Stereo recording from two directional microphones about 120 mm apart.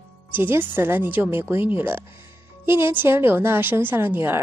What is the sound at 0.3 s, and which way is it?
A woman's voice, 20° right (ahead or behind).